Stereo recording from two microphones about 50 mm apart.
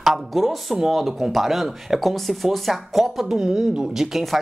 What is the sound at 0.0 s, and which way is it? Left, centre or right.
Speech, centre.